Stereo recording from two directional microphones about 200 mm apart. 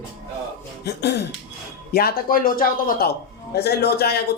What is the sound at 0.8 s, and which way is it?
Speech, 55° left (ahead or behind).